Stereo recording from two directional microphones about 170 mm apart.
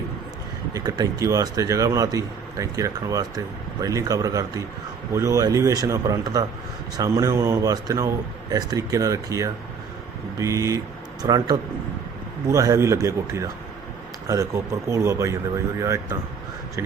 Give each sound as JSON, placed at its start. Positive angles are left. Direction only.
{"t": 0.7, "sound": "a man's voice", "side_deg": -20}